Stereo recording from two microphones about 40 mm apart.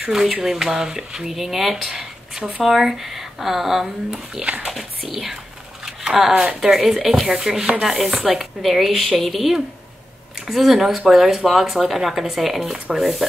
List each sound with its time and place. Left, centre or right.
0.1 s speech: centre
4.4 s speech: right
4.6 s speech: centre
5.9 s a sound: centre
6.6 s speech: centre